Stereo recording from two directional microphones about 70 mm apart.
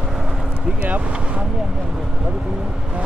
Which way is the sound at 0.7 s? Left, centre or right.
Centre.